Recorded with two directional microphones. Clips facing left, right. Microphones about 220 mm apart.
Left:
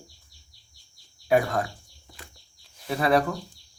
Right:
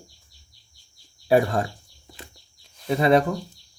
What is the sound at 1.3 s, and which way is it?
Speech, 30° right (ahead or behind).